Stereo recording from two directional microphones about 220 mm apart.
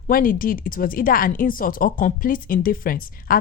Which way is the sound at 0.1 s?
40° left (ahead or behind).